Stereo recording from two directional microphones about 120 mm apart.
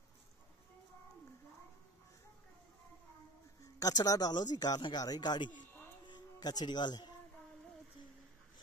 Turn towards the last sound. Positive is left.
turn(degrees=40)  # may be behind; listen again after turning